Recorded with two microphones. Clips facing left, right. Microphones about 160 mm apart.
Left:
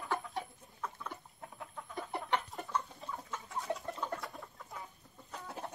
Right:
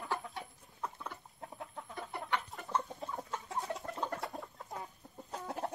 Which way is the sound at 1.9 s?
20° left (ahead or behind).